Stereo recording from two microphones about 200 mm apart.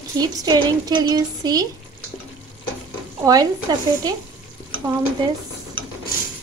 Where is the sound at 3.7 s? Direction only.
20° right (ahead or behind).